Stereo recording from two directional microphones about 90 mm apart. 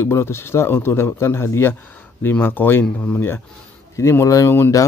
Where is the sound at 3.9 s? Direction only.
30° left (ahead or behind).